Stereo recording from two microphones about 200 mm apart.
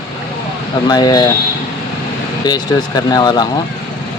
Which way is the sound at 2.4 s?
20° left (ahead or behind).